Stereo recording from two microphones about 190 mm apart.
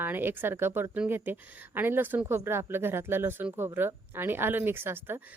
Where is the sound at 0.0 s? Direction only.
10° right (ahead or behind).